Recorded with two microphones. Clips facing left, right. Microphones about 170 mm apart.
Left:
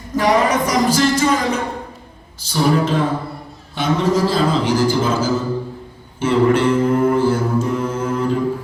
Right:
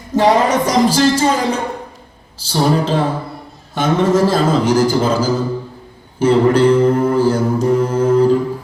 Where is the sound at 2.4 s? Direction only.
30° right (ahead or behind).